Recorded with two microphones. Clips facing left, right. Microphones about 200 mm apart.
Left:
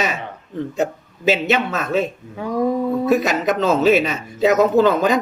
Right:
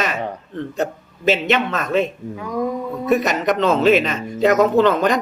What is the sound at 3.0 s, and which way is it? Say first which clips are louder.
Speech: right 3 dB; centre (ahead or behind).